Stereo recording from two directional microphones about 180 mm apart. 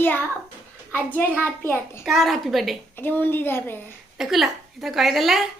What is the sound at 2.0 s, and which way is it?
Speech, centre (ahead or behind).